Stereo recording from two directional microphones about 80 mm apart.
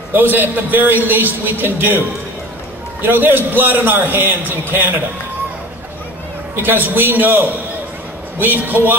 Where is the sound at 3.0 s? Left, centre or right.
Right.